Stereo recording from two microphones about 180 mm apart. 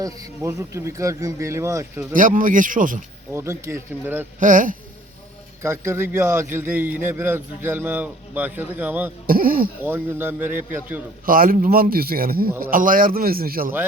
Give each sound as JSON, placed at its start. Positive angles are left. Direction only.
{"t": 0.0, "sound": "a man's voice", "side_deg": -15}
{"t": 2.1, "sound": "speech", "side_deg": -45}
{"t": 3.3, "sound": "a man's voice", "side_deg": -15}
{"t": 4.4, "sound": "speech", "side_deg": -45}
{"t": 5.6, "sound": "a man's voice", "side_deg": -15}
{"t": 9.2, "sound": "speech", "side_deg": -55}
{"t": 9.8, "sound": "a man's voice", "side_deg": -10}
{"t": 11.3, "sound": "speech", "side_deg": -50}